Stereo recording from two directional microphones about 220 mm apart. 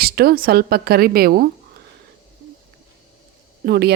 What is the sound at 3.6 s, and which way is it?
Speech, 45° right (ahead or behind).